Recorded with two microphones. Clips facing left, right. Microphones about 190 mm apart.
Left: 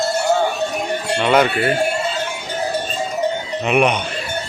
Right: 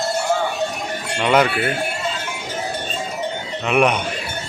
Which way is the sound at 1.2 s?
5° right (ahead or behind).